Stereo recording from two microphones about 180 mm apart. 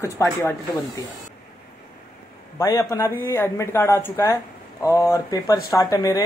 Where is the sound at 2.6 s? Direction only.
15° left (ahead or behind).